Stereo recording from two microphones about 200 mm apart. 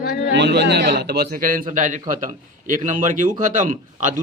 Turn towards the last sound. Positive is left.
turn(degrees=-40)  # may be behind; listen again after turning